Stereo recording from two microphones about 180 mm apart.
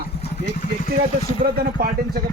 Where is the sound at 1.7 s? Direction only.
55° right (ahead or behind).